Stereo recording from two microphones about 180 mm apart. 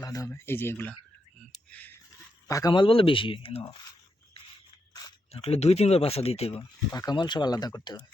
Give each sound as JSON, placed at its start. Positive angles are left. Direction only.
{"t": 0.0, "sound": "speech", "side_deg": 20}
{"t": 1.7, "sound": "a sound", "side_deg": 10}
{"t": 2.5, "sound": "speech", "side_deg": 20}
{"t": 5.3, "sound": "speech", "side_deg": 35}
{"t": 6.9, "sound": "speech", "side_deg": 20}